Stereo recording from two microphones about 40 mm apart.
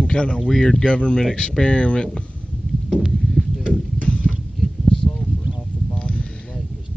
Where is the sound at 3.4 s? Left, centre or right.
Left.